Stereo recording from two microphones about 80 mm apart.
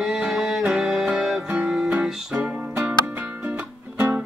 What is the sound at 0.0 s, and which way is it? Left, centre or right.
Music, centre.